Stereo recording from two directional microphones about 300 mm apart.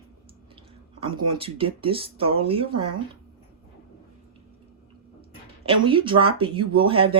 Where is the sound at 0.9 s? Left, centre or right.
Centre.